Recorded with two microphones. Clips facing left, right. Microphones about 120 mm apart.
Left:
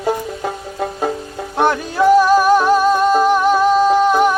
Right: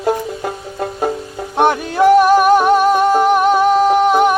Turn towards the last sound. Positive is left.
turn(degrees=-15)  # may be behind; listen again after turning